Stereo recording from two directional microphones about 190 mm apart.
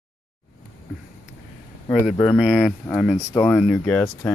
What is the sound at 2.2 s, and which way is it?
Speech, centre (ahead or behind).